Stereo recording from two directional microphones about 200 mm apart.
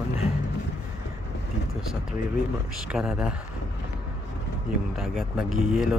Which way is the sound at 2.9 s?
5° right (ahead or behind).